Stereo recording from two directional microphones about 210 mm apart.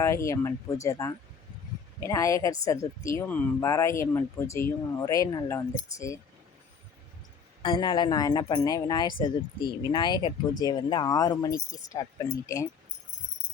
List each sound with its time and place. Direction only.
0.0 s speech: 15° left (ahead or behind)
7.6 s speech: 20° left (ahead or behind)